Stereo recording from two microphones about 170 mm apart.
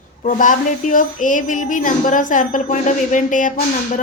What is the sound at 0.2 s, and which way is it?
A woman's voice, 50° left (ahead or behind).